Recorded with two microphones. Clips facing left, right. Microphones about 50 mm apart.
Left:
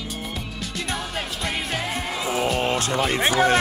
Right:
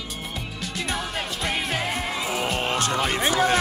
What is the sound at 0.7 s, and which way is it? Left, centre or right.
Music, centre.